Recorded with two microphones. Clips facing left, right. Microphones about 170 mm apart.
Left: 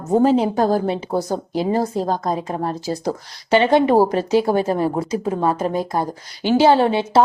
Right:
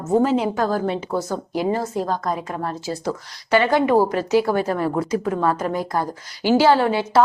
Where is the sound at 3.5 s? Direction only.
25° left (ahead or behind).